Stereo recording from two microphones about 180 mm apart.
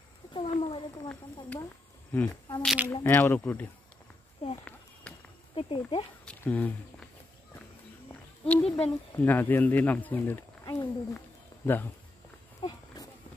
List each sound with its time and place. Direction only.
0.3 s a sound: 30° left (ahead or behind)
2.1 s speech: 10° left (ahead or behind)
2.6 s speech: 5° right (ahead or behind)
2.9 s speech: 10° left (ahead or behind)
5.1 s a sound: 5° left (ahead or behind)
5.5 s speech: 30° left (ahead or behind)
6.2 s speech: 10° left (ahead or behind)
8.1 s a sound: 10° left (ahead or behind)
9.1 s speech: 10° left (ahead or behind)
12.6 s walk: 20° left (ahead or behind)